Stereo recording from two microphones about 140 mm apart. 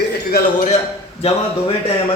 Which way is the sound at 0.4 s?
90° left.